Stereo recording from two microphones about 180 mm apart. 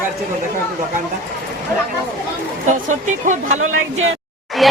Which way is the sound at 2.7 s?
45° right (ahead or behind).